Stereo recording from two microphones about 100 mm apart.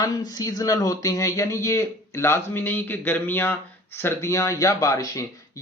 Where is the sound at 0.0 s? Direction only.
40° left (ahead or behind).